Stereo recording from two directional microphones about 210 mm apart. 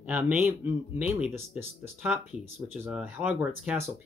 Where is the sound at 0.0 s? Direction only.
10° right (ahead or behind).